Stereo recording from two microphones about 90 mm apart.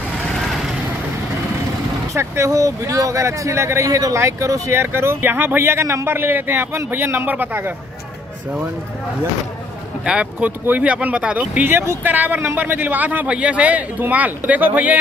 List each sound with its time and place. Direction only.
0.3 s vehicle: centre (ahead or behind)
2.1 s speech: 30° right (ahead or behind)
4.7 s speech: 25° right (ahead or behind)
10.0 s speech: 15° right (ahead or behind)